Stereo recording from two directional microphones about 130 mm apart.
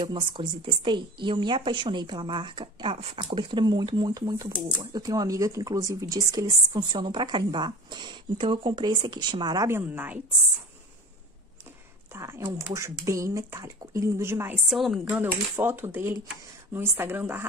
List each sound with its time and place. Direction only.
0.0 s speech: 40° right (ahead or behind)
9.7 s a woman's voice: 15° right (ahead or behind)
12.1 s speech: 20° right (ahead or behind)
14.7 s speech: centre (ahead or behind)
15.6 s a woman's voice: 15° right (ahead or behind)